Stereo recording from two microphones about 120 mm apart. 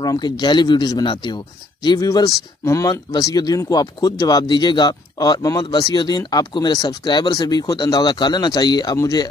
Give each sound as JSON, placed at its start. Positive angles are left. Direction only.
{"t": 0.0, "sound": "speech", "side_deg": 35}
{"t": 2.0, "sound": "speech", "side_deg": 25}